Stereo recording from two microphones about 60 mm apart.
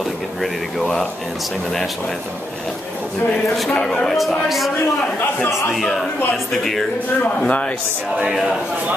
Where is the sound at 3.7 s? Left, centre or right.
Centre.